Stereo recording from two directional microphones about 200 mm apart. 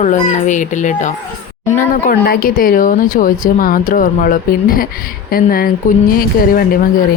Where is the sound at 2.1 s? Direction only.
50° left (ahead or behind).